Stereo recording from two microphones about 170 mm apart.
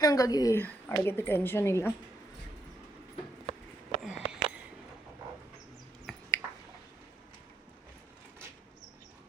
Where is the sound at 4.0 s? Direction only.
5° right (ahead or behind).